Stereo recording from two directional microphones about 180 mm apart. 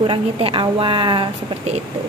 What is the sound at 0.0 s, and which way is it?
A woman's voice, 30° right (ahead or behind).